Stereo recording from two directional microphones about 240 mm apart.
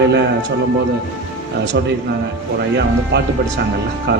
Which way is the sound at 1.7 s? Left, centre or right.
Right.